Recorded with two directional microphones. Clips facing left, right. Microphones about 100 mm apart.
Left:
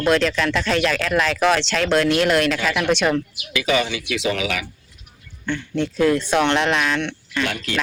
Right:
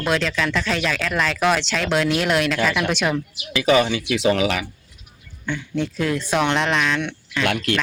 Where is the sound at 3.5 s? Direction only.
35° right (ahead or behind).